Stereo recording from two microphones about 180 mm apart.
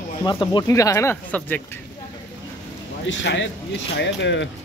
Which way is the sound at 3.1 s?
85° left.